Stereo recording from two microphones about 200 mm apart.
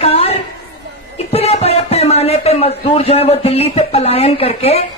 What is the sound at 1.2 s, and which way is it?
Speech, 30° left (ahead or behind).